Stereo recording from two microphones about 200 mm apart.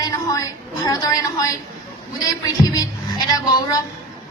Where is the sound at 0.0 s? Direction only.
15° left (ahead or behind).